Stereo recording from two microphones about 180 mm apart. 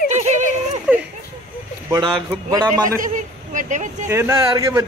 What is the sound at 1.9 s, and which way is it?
Speech, 20° right (ahead or behind).